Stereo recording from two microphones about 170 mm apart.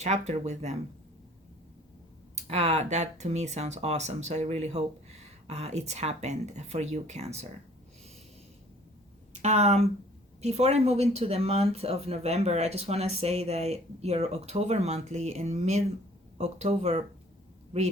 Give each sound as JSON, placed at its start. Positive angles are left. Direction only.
{"t": 0.0, "sound": "speech", "side_deg": -40}
{"t": 2.3, "sound": "speech", "side_deg": -40}
{"t": 9.3, "sound": "speech", "side_deg": -40}